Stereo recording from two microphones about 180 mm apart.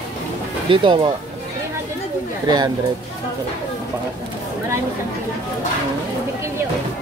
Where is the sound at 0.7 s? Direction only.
25° right (ahead or behind).